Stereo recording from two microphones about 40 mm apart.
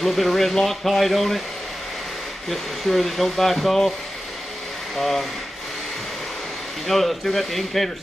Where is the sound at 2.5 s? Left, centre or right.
Centre.